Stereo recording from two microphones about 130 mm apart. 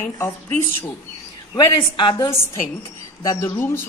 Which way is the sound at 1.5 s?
40° left (ahead or behind).